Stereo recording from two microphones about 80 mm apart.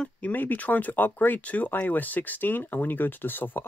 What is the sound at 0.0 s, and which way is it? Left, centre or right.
Speech, left.